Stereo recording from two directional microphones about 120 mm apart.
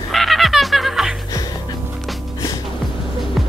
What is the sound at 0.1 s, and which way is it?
Music, centre (ahead or behind).